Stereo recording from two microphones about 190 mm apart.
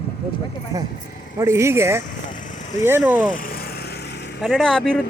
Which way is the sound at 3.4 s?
50° left (ahead or behind).